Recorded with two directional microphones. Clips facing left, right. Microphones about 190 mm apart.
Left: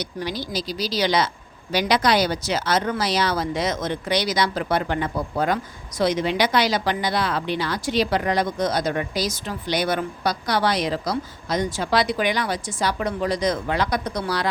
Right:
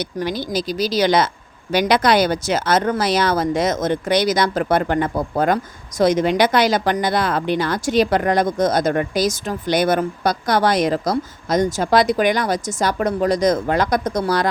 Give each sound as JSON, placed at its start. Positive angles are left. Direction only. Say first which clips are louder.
{"t": 0.0, "sound": "speech", "louder": "right 5 dB", "side_deg": -50}